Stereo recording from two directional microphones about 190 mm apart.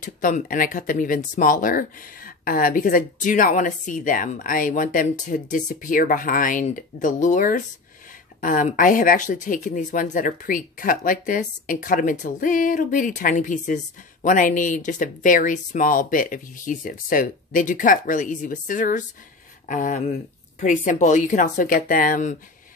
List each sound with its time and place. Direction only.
0.0 s speech: 45° left (ahead or behind)